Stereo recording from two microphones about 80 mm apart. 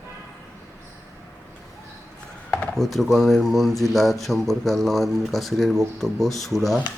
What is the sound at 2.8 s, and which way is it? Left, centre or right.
A man's voice, centre.